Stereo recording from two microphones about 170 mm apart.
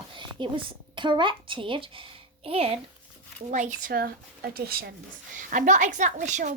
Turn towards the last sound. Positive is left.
turn(degrees=-45)  # may be behind; listen again after turning